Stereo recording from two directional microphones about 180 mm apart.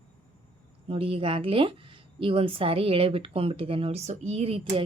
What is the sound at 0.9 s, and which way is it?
A woman's voice, 30° right (ahead or behind).